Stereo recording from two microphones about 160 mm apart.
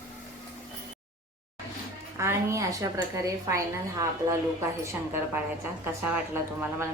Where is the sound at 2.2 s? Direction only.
15° right (ahead or behind).